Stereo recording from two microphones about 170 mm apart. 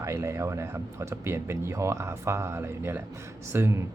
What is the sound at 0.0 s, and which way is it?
Speech, 15° right (ahead or behind).